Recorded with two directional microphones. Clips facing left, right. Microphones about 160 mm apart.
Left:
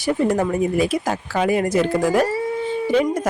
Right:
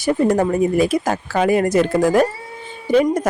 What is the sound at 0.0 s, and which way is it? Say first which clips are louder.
Speech: right 3 dB; 45° right (ahead or behind).